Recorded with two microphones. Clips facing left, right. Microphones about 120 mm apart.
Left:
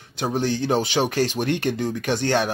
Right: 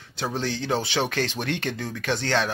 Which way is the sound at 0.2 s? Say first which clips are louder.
Left 5 dB; 15° left (ahead or behind).